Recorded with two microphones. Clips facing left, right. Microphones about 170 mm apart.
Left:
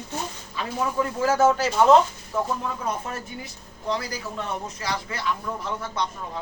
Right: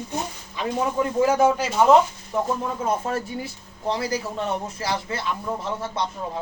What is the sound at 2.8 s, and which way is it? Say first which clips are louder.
A man's voice: right 5 dB; 30° right (ahead or behind).